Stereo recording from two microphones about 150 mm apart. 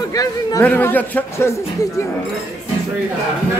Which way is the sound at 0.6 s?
15° left (ahead or behind).